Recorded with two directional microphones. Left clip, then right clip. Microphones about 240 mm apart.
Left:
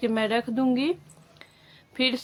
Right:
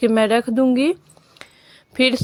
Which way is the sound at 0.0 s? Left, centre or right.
Right.